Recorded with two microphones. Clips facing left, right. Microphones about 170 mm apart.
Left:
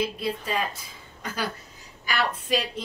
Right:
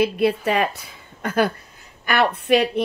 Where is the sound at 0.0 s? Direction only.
70° right (ahead or behind).